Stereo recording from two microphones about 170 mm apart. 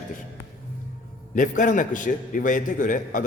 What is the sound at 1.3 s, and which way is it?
A man's voice, 50° left (ahead or behind).